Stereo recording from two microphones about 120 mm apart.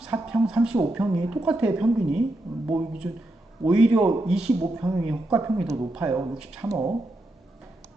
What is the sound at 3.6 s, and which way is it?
Speech, 5° right (ahead or behind).